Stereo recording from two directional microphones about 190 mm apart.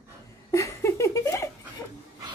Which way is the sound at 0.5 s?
15° left (ahead or behind).